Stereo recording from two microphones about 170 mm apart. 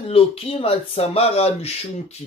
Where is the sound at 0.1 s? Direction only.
35° left (ahead or behind).